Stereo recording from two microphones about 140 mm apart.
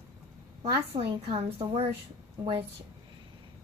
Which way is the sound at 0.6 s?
40° right (ahead or behind).